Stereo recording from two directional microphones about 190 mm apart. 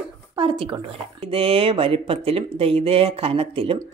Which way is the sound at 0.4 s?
25° right (ahead or behind).